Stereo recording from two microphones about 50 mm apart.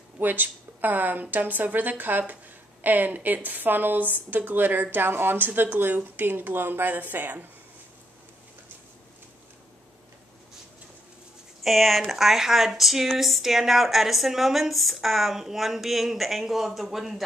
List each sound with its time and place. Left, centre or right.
0.2 s a woman's voice: right
11.6 s speech: centre